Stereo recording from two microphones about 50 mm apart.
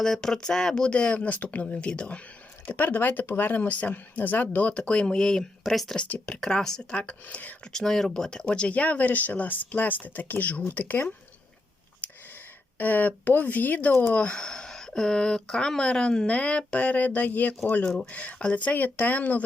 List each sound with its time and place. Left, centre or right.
0.0 s speech: centre
2.6 s speech: left
4.7 s speech: centre
5.7 s speech: centre
6.2 s speech: centre
6.9 s speech: left
7.7 s speech: centre; by 11.1 s left
12.8 s speech: left
14.1 s speech: left